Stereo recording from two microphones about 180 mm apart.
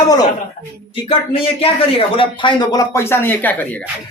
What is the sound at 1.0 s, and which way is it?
A man's voice, 30° left (ahead or behind).